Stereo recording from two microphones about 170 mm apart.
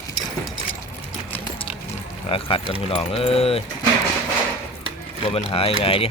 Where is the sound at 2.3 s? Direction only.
30° left (ahead or behind).